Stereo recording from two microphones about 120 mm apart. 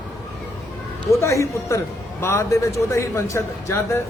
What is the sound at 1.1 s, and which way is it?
A man's voice, 25° left (ahead or behind).